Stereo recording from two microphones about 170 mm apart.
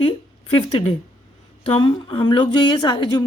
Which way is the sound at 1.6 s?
30° left (ahead or behind).